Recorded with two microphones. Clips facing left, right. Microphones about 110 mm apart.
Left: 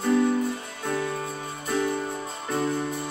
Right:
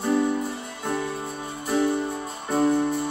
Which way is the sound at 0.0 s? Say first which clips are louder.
Left 1 dB; 10° right (ahead or behind).